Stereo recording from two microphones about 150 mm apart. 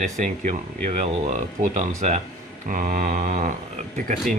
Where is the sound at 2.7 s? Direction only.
65° right (ahead or behind).